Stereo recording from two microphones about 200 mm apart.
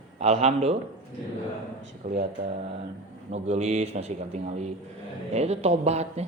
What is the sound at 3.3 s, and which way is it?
A man's voice, 35° right (ahead or behind).